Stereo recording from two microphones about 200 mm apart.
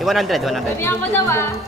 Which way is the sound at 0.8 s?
10° left (ahead or behind).